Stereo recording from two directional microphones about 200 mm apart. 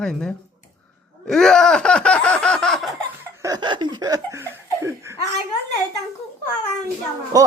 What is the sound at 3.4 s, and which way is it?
Laughter, 20° right (ahead or behind).